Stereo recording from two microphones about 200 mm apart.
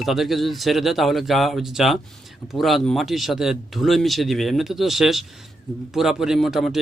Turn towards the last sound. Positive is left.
turn(degrees=0)  # may be behind; listen again after turning